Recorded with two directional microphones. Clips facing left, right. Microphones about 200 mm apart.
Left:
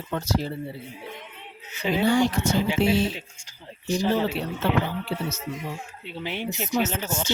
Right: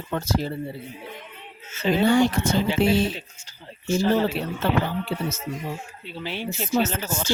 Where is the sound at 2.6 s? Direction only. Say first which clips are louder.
Right 2 dB; 10° left (ahead or behind).